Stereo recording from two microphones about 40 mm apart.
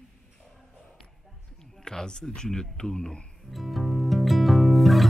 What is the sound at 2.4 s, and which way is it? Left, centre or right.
Speech, centre.